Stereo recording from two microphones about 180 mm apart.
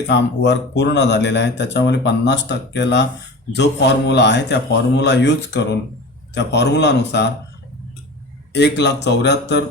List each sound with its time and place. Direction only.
0.1 s speech: 75° left (ahead or behind)
8.5 s speech: 70° left (ahead or behind)